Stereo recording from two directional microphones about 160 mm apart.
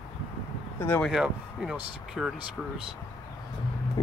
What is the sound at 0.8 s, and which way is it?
Speech, 10° left (ahead or behind).